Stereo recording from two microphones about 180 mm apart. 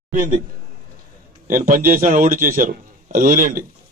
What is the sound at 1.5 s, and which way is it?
A man's voice, 50° right (ahead or behind).